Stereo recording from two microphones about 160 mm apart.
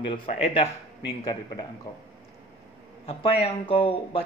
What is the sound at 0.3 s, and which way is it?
Speech, 35° left (ahead or behind).